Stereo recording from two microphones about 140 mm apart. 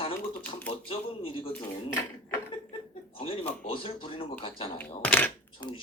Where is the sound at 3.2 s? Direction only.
45° left (ahead or behind).